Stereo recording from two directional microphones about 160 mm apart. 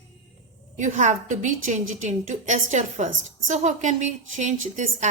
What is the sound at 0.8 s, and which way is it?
A woman's voice, 50° right (ahead or behind).